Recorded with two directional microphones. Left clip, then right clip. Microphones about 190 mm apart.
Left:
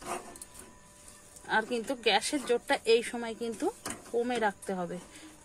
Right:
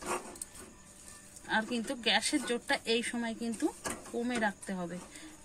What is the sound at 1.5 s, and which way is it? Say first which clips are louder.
A woman's voice: left 3 dB; 45° left (ahead or behind).